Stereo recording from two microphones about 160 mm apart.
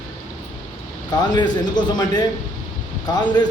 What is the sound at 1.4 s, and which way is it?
Speech, 25° left (ahead or behind).